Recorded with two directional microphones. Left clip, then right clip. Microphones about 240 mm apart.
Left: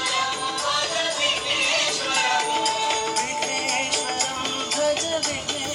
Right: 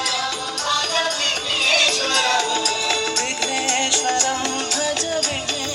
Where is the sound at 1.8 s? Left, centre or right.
Right.